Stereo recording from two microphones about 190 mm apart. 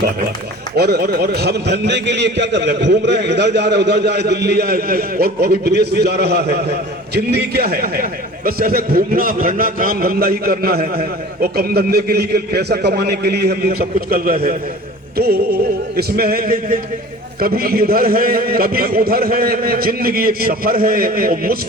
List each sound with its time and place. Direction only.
0.8 s a man's voice: 55° right (ahead or behind)
15.1 s music: 55° right (ahead or behind)
16.0 s a man's voice: 55° right (ahead or behind)